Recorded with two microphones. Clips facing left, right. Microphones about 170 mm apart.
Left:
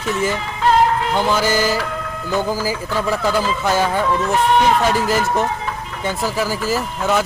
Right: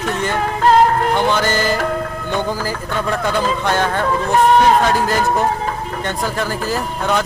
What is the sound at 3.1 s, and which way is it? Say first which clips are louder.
Speech: right 1 dB; 5° left (ahead or behind).